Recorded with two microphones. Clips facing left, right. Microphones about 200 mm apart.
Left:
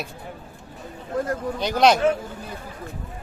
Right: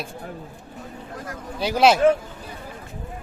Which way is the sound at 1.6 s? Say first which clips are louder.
Right 1 dB; 5° right (ahead or behind).